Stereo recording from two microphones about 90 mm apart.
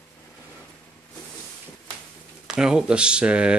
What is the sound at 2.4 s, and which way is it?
Speech, 10° right (ahead or behind).